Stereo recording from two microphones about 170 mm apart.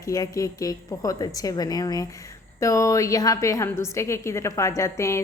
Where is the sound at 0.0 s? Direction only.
20° left (ahead or behind).